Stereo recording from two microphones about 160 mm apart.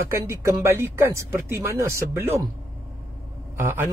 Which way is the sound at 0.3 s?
15° right (ahead or behind).